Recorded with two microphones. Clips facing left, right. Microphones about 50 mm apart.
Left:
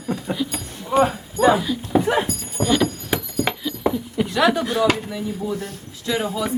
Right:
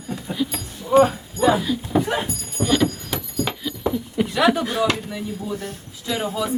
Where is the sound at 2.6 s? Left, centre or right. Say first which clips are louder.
Even; centre.